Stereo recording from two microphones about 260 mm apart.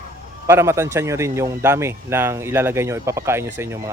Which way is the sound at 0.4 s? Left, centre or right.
Centre.